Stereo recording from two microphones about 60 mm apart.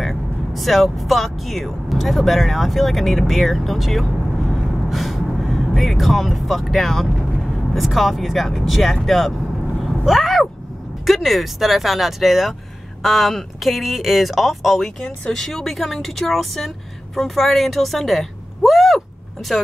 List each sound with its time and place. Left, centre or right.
0.0 s vehicle: centre
0.8 s speech: centre
9.8 s vehicle: centre
11.1 s speech: centre